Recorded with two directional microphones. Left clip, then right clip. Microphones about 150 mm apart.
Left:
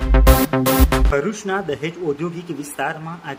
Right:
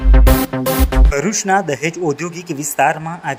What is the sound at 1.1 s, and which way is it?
Speech, 30° right (ahead or behind).